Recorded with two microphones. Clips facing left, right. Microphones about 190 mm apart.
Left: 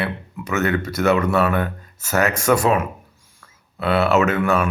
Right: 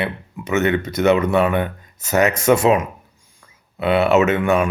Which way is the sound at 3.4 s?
15° right (ahead or behind).